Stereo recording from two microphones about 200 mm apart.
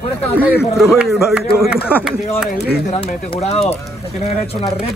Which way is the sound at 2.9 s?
30° left (ahead or behind).